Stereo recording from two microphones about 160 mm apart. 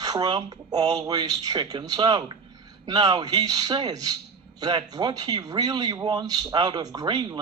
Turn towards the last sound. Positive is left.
turn(degrees=-30)  # may be behind; listen again after turning